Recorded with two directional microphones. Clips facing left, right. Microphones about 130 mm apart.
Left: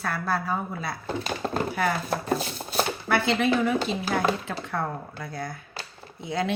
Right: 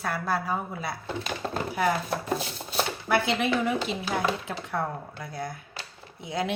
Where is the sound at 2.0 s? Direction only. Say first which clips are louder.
Left 2 dB; 40° left (ahead or behind).